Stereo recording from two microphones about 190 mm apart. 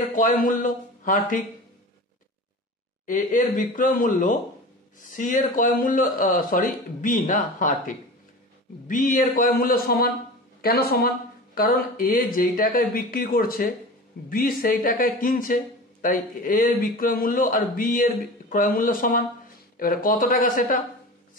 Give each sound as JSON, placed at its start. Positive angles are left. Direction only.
{"t": 0.1, "sound": "speech", "side_deg": 45}
{"t": 3.1, "sound": "speech", "side_deg": 40}